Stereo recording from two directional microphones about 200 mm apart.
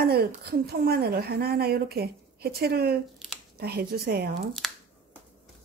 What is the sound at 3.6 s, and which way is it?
Speech, 50° right (ahead or behind).